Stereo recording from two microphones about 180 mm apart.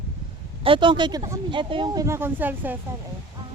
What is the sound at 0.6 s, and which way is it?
Speech, 30° right (ahead or behind).